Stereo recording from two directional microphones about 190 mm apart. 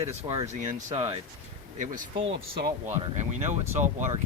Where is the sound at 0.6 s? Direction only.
40° right (ahead or behind).